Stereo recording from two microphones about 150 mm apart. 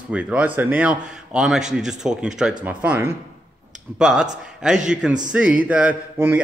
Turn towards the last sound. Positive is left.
turn(degrees=-10)  # may be behind; listen again after turning